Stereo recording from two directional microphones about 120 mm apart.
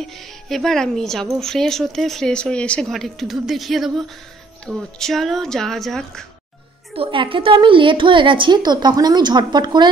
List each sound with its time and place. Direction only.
0.0 s a woman's voice: centre (ahead or behind)
7.0 s a woman's voice: 45° right (ahead or behind)